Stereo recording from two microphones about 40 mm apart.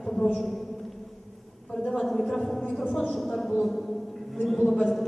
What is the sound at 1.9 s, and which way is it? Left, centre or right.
A woman's voice, centre.